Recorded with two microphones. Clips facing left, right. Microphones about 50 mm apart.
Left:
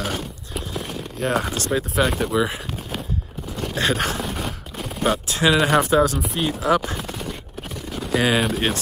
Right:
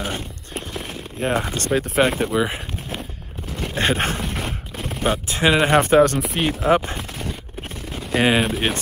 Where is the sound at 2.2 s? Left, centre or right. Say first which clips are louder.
Even; centre.